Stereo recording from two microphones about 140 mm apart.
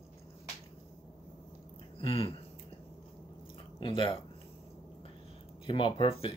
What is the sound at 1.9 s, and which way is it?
Speech, 45° left (ahead or behind).